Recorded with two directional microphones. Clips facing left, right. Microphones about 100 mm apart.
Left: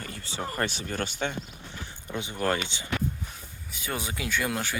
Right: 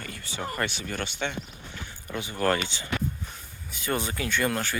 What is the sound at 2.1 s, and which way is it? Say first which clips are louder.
Speech: right 2 dB; 20° left (ahead or behind).